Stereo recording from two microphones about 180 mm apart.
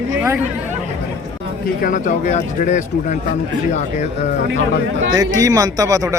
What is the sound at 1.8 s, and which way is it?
Speech, 45° left (ahead or behind).